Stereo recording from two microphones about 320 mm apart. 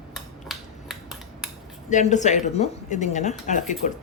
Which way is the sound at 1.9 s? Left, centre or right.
Left.